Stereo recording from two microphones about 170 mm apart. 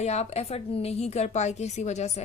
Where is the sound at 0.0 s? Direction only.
40° left (ahead or behind).